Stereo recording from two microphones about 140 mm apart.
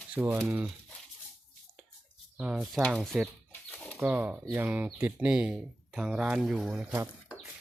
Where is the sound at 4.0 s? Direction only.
10° right (ahead or behind).